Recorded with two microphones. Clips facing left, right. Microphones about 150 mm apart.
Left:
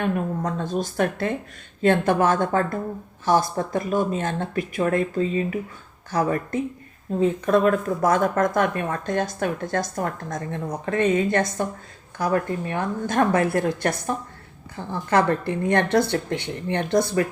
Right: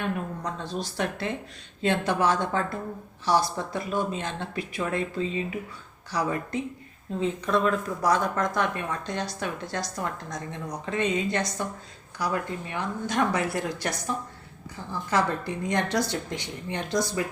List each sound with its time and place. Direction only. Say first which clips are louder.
0.0 s speech: left 6 dB; 50° left (ahead or behind)
15.1 s speech: left 6 dB; 60° left (ahead or behind)